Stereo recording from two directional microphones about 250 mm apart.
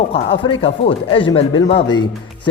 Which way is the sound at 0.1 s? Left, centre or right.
Left.